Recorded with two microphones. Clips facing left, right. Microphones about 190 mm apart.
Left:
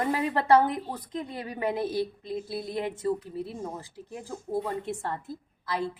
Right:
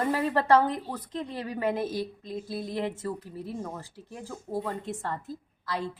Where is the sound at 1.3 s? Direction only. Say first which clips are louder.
Right 1 dB; 15° left (ahead or behind).